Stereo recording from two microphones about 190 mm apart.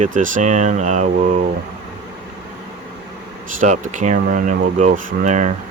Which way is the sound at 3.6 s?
40° right (ahead or behind).